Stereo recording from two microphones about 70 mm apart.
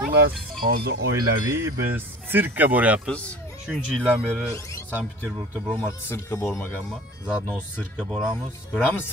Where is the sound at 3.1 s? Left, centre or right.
Centre.